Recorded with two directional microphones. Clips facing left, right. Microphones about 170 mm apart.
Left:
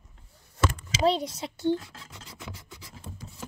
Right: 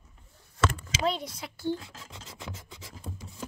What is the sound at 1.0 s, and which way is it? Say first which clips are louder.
Speech: left 6 dB; 30° left (ahead or behind).